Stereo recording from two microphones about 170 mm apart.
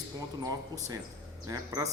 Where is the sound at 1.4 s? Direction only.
20° right (ahead or behind).